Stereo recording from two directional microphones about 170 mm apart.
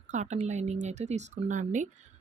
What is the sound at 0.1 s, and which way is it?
Speech, 45° right (ahead or behind).